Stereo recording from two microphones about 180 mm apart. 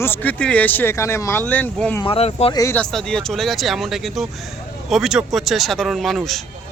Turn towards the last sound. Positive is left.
turn(degrees=0)  # may be behind; listen again after turning